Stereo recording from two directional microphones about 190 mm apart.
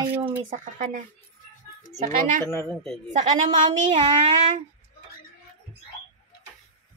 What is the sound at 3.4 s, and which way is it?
Speech, 25° right (ahead or behind).